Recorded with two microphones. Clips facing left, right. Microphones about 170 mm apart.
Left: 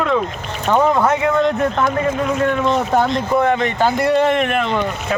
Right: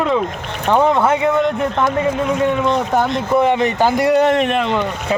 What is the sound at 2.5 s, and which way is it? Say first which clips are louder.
Speech: even; 15° right (ahead or behind).